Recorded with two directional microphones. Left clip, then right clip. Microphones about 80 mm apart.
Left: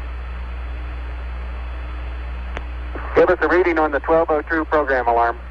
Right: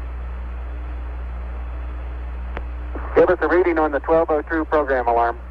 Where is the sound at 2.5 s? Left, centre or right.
Left.